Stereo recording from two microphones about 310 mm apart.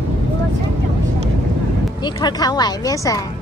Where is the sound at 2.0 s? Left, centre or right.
Centre.